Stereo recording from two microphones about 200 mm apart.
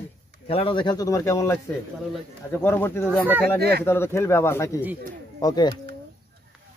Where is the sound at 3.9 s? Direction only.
15° left (ahead or behind).